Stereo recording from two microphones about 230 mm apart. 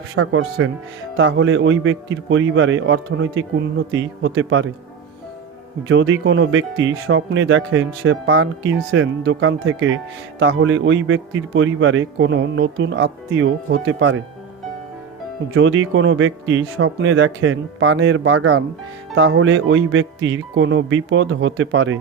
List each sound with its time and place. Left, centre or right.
0.2 s speech: right
5.9 s speech: right
15.5 s speech: right